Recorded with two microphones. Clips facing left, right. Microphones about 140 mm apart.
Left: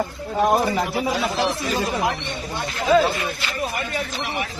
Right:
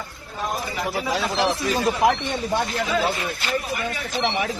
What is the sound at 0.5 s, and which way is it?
Speech, 50° left (ahead or behind).